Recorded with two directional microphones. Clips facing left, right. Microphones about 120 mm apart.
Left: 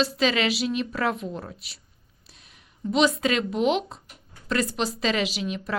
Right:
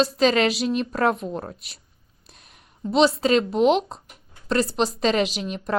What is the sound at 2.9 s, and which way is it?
Speech, 35° right (ahead or behind).